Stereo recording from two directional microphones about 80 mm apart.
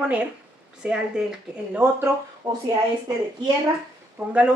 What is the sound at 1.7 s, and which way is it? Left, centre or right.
Speech, right.